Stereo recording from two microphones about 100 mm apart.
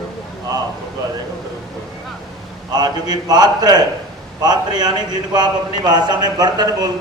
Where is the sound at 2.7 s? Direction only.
40° right (ahead or behind).